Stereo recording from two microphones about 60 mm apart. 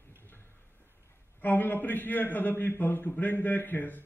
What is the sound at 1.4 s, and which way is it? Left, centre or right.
A man's voice, left.